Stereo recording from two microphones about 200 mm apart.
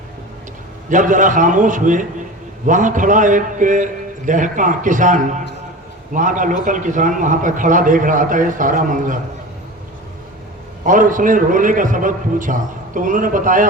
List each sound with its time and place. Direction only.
0.9 s a man's voice: 40° right (ahead or behind)
10.8 s a man's voice: 40° right (ahead or behind)